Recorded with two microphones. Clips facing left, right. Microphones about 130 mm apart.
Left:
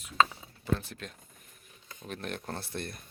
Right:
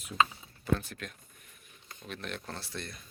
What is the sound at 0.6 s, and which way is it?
Speech, 30° left (ahead or behind).